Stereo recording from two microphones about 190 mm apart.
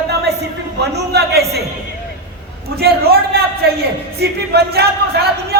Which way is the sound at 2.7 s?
55° right (ahead or behind).